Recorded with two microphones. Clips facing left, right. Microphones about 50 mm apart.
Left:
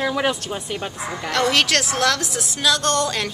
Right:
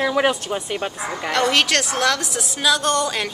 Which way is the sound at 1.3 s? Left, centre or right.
Centre.